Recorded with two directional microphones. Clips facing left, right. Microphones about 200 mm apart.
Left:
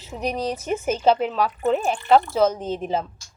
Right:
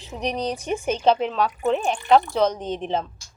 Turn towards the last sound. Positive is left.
turn(degrees=5)  # may be behind; listen again after turning